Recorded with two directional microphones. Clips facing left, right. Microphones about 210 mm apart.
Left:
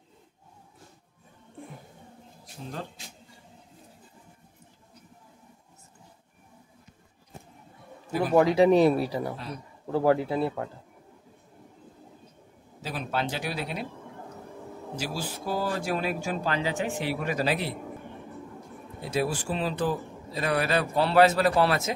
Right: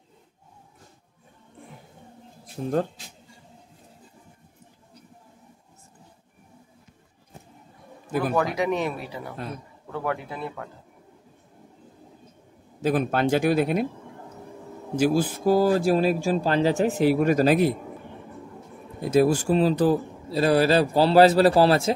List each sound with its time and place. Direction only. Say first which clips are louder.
2.4 s speech: right 13 dB; 50° right (ahead or behind)
8.4 s speech: left 9 dB; 30° left (ahead or behind)
12.8 s speech: right 9 dB; 50° right (ahead or behind)
15.0 s speech: right 13 dB; 50° right (ahead or behind)
18.9 s a man's voice: right 9 dB; 45° right (ahead or behind)